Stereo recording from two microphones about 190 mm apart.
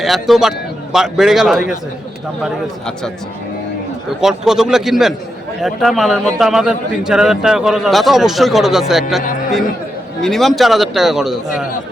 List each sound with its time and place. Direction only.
0.0 s a man's voice: centre (ahead or behind)
4.2 s a man's voice: 5° right (ahead or behind)